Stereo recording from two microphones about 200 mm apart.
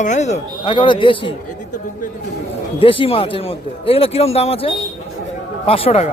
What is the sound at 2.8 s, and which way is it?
Speech, 25° left (ahead or behind).